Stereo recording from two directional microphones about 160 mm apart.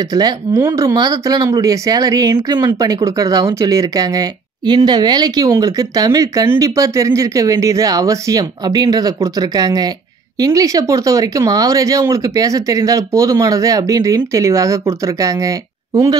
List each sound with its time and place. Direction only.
0.0 s speech: 25° right (ahead or behind)